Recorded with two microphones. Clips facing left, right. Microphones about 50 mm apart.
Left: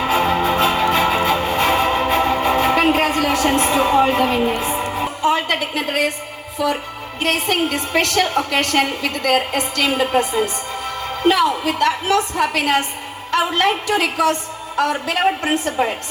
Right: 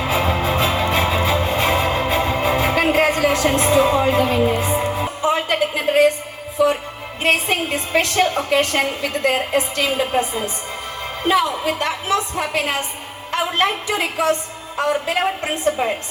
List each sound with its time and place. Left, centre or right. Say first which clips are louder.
0.1 s music: left 2 dB; left
7.2 s a woman's voice: even; left